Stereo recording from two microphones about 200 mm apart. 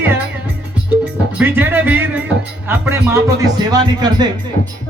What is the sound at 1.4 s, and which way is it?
Speech, 10° right (ahead or behind).